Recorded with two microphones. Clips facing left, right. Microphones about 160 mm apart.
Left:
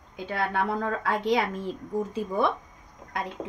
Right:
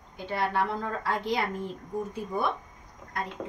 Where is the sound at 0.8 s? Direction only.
80° left.